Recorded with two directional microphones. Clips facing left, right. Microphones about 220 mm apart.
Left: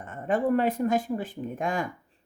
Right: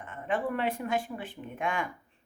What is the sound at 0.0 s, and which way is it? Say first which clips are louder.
Speech: left 5 dB; 40° left (ahead or behind).